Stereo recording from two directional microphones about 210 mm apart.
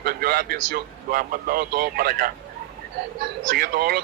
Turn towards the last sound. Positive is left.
turn(degrees=-45)  # may be behind; listen again after turning